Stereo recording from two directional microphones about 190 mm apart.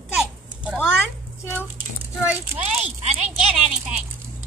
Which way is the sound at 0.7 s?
10° left (ahead or behind).